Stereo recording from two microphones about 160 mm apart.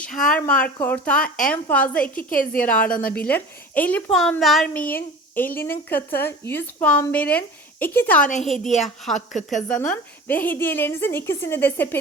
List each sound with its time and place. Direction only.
0.3 s a woman's voice: 10° left (ahead or behind)
2.1 s a woman's voice: 60° left (ahead or behind)
2.6 s a woman's voice: 10° left (ahead or behind)
8.4 s a woman's voice: centre (ahead or behind)
9.1 s speech: 50° left (ahead or behind)
9.6 s a woman's voice: 5° left (ahead or behind)